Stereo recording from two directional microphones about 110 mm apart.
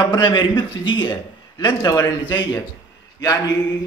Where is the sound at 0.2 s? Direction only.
45° left (ahead or behind).